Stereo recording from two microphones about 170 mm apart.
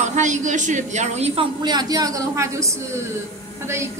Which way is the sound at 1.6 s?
25° right (ahead or behind).